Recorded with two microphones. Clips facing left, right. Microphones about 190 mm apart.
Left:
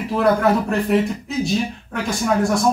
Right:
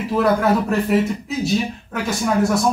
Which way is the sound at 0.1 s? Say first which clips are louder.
Even; centre (ahead or behind).